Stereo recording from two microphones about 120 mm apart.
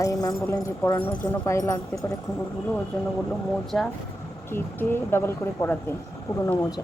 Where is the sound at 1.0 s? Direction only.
10° left (ahead or behind).